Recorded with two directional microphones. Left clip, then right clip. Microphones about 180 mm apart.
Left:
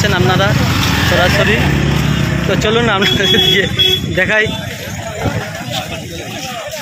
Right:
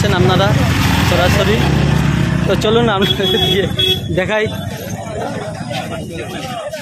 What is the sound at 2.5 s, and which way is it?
Speech, 15° right (ahead or behind).